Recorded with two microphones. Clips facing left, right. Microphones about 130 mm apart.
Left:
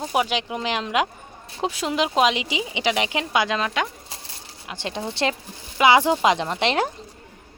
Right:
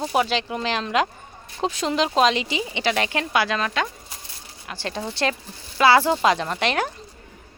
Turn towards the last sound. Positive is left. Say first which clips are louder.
# left 1 dB
turn(degrees=25)  # may be behind; listen again after turning